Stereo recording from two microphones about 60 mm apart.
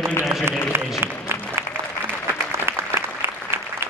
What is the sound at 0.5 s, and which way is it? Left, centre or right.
Applause, right.